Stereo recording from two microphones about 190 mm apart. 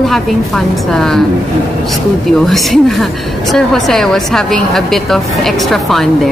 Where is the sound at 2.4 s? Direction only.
Centre (ahead or behind).